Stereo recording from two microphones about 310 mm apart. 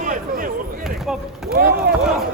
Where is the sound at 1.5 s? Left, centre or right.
Right.